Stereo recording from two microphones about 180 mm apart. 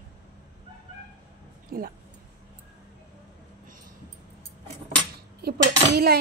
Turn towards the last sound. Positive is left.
turn(degrees=-60)  # may be behind; listen again after turning